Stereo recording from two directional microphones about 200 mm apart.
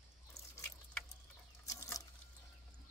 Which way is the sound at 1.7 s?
15° left (ahead or behind).